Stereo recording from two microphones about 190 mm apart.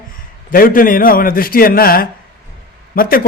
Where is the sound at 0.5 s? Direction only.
50° left (ahead or behind).